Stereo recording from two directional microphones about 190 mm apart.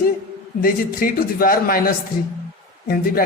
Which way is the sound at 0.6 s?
50° left (ahead or behind).